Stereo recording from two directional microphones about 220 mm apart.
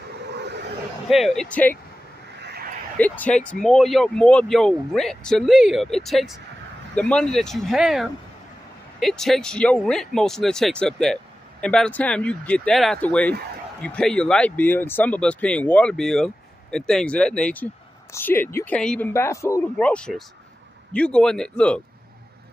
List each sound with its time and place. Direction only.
0.1 s vehicle: 50° right (ahead or behind)
1.0 s speech: centre (ahead or behind)
2.4 s a sound: 45° right (ahead or behind)
3.0 s speech: 5° left (ahead or behind)